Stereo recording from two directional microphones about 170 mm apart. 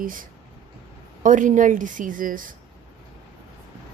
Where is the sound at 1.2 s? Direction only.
50° right (ahead or behind).